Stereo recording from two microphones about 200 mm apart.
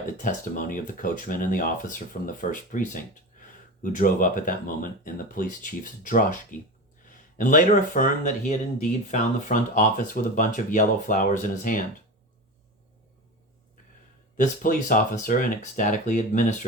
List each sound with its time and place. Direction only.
0.2 s speech: 40° left (ahead or behind)
14.3 s speech: 40° left (ahead or behind)